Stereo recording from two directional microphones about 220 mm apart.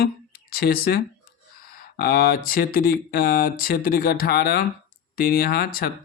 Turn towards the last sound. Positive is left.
turn(degrees=40)  # may be behind; listen again after turning